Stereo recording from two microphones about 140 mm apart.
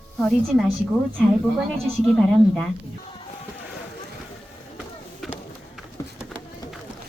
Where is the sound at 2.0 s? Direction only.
5° left (ahead or behind).